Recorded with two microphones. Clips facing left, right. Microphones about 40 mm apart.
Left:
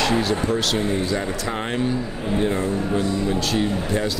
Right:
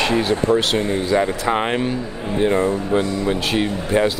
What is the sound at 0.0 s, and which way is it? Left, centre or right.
Speech, right.